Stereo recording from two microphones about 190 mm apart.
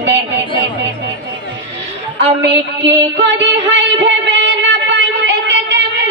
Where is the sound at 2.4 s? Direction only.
65° right (ahead or behind).